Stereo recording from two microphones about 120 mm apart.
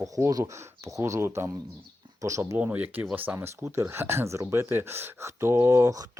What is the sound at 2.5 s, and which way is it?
Speech, 15° right (ahead or behind).